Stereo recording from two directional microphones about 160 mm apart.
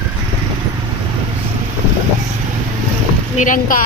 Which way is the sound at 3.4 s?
55° left (ahead or behind).